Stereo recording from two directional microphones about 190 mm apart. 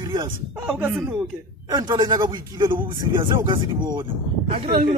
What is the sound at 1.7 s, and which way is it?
A man's voice, 20° right (ahead or behind).